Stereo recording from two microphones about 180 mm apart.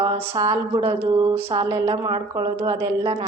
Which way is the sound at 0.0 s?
20° right (ahead or behind).